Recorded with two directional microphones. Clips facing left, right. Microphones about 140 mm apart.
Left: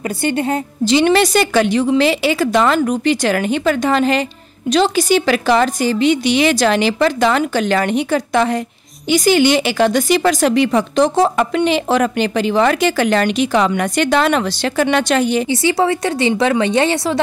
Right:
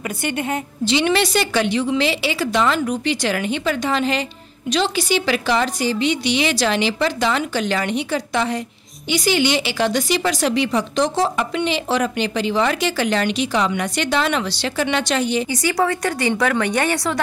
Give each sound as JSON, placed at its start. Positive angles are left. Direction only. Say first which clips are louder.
{"t": 0.2, "sound": "a woman's voice", "louder": "left 6 dB", "side_deg": 35}
{"t": 15.5, "sound": "a woman's voice", "louder": "left 4 dB", "side_deg": 25}